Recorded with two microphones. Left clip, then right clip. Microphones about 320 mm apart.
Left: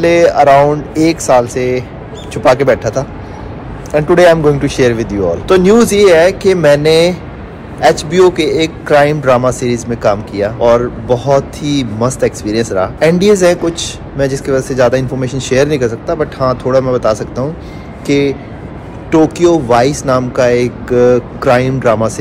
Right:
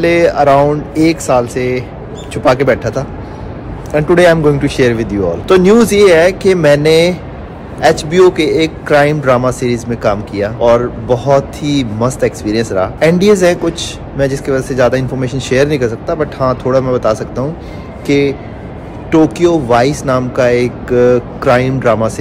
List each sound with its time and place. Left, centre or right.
0.0 s a man's voice: centre